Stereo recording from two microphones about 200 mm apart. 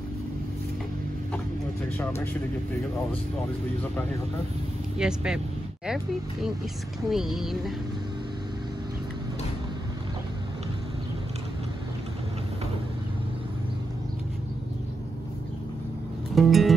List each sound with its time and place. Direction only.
4.9 s music: 5° right (ahead or behind)
7.1 s music: centre (ahead or behind)
16.3 s music: centre (ahead or behind)